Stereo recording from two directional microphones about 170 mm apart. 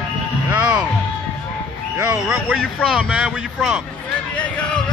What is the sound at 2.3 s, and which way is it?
Speech, 5° right (ahead or behind).